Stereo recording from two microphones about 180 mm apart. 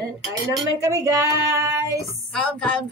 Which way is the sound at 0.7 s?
20° right (ahead or behind).